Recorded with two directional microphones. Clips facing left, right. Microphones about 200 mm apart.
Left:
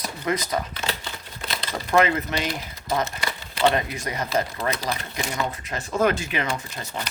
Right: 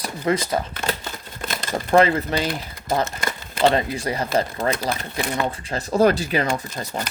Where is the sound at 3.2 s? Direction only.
45° right (ahead or behind).